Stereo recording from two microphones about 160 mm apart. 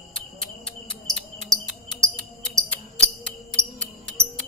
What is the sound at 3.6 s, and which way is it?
Music, 20° right (ahead or behind).